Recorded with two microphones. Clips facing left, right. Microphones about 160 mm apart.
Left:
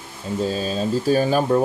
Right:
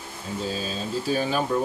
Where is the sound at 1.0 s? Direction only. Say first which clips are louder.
Left 6 dB; 45° left (ahead or behind).